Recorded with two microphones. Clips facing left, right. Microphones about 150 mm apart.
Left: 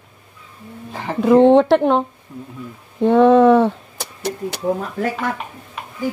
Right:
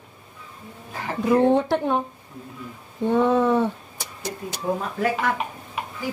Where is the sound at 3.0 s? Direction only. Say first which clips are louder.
Left 8 dB; 85° left.